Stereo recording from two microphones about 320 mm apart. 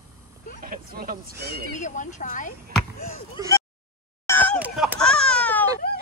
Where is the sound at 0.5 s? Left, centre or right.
Right.